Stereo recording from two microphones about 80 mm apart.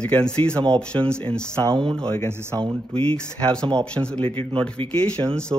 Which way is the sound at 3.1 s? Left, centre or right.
Centre.